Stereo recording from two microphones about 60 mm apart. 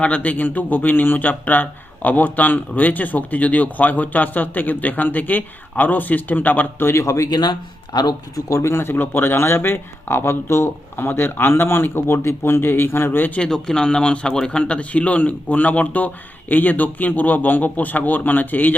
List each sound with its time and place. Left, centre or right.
0.0 s speech: left
7.0 s speech: left
8.4 s speech: left
13.3 s speech: centre; by 18.7 s left